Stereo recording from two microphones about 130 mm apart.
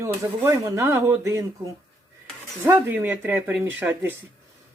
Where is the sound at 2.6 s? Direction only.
15° right (ahead or behind).